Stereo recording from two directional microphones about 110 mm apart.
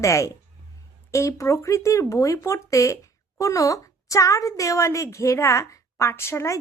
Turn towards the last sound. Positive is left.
turn(degrees=25)  # may be behind; listen again after turning